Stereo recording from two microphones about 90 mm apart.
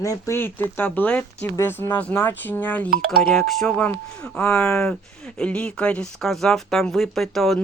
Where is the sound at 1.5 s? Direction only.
25° left (ahead or behind).